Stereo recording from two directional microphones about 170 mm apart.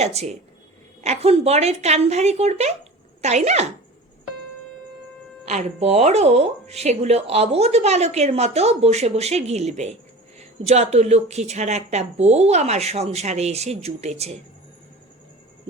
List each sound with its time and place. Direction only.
0.0 s speech: 40° right (ahead or behind)
5.5 s speech: 40° right (ahead or behind)